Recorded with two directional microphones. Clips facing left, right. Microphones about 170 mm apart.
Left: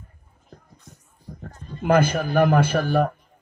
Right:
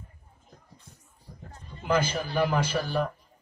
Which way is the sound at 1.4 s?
60° left (ahead or behind).